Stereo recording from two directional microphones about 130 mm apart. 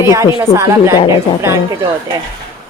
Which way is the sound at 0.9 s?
40° left (ahead or behind).